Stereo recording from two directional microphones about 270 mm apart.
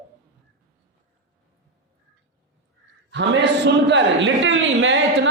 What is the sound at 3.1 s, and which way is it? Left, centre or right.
A man's voice, right.